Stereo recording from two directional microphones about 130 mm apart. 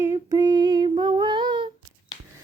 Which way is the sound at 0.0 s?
25° right (ahead or behind).